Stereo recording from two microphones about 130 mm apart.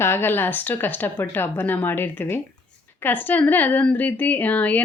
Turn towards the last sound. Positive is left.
turn(degrees=10)  # may be behind; listen again after turning